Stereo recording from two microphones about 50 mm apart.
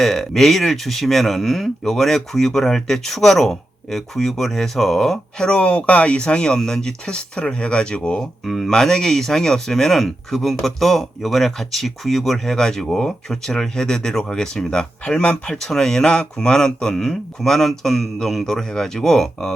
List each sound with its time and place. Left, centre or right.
0.0 s speech: centre; by 8.2 s left
8.4 s speech: centre
8.7 s speech: centre